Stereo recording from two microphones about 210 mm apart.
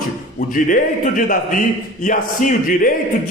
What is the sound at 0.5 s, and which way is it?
Speech, 40° left (ahead or behind).